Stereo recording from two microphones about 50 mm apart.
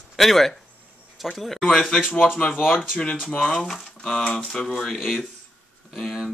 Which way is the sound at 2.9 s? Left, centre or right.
Left.